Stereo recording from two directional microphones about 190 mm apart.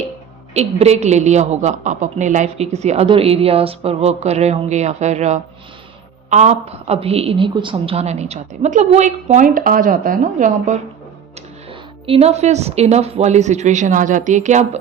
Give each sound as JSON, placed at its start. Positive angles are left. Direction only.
{"t": 0.5, "sound": "a woman's voice", "side_deg": -35}
{"t": 11.7, "sound": "a woman's voice", "side_deg": -30}